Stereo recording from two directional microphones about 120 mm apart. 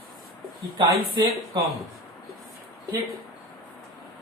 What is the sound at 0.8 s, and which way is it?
Speech, 30° right (ahead or behind).